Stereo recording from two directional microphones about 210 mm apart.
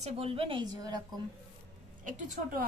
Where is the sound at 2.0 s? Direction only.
40° right (ahead or behind).